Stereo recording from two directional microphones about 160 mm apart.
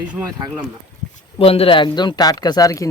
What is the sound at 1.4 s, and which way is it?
Speech, 35° left (ahead or behind).